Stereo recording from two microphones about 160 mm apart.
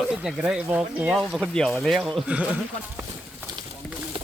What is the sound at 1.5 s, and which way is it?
Speech, 5° left (ahead or behind).